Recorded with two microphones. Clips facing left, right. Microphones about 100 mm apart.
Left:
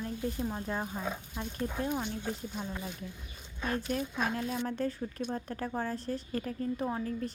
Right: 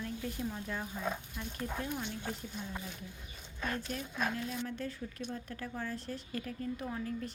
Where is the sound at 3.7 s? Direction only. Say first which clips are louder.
Left 6 dB; 40° left (ahead or behind).